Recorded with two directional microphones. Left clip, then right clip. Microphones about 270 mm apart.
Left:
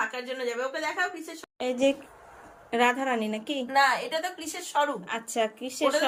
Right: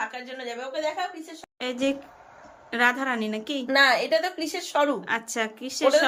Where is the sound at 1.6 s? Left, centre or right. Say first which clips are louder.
Left 2 dB; centre.